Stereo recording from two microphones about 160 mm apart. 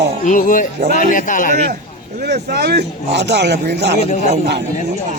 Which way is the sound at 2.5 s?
85° right.